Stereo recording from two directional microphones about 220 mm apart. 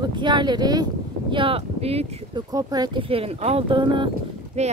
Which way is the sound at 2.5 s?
15° right (ahead or behind).